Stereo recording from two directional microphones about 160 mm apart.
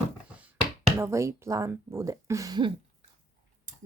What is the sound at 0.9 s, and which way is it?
Speech, 20° right (ahead or behind).